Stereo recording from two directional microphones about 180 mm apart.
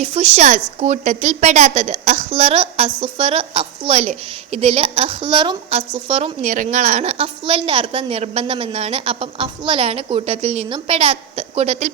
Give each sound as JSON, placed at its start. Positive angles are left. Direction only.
{"t": 0.0, "sound": "a woman's voice", "side_deg": -35}